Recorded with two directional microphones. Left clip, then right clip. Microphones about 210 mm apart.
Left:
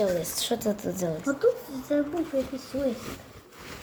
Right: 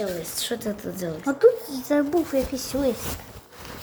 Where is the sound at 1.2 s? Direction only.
40° right (ahead or behind).